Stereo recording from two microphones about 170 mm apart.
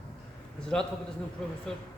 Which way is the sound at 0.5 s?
5° left (ahead or behind).